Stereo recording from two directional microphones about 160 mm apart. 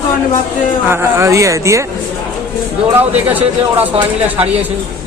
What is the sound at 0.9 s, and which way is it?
Speech, 15° right (ahead or behind).